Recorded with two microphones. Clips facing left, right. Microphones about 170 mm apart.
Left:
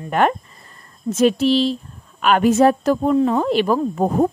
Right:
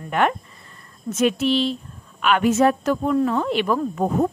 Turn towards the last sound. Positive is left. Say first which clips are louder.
# left 3 dB
turn(degrees=35)  # may be behind; listen again after turning